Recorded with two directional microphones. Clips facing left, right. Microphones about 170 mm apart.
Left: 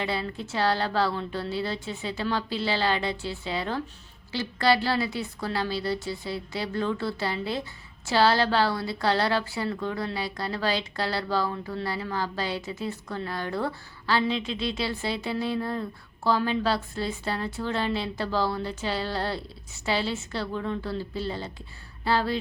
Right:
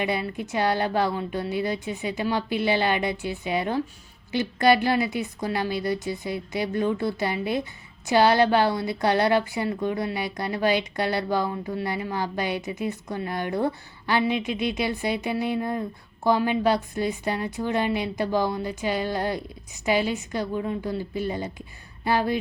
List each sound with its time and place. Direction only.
0.0 s a woman's voice: 15° right (ahead or behind)